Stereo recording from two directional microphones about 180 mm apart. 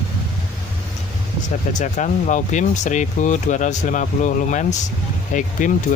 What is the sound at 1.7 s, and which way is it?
Speech, 45° left (ahead or behind).